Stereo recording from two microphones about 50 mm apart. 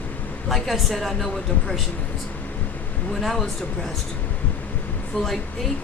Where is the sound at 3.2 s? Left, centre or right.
Centre.